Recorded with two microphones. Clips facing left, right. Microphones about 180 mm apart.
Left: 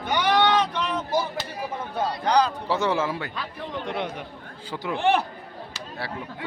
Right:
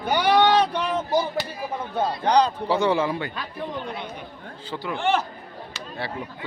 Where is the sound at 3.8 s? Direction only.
90° left.